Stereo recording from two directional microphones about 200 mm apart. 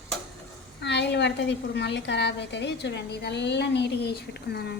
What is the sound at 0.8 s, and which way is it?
A woman's voice, 60° left (ahead or behind).